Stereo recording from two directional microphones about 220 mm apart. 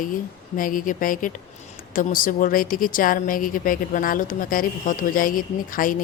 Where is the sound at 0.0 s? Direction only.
40° left (ahead or behind).